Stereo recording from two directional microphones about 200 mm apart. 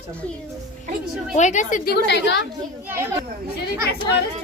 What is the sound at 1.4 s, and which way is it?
A woman's voice, 35° left (ahead or behind).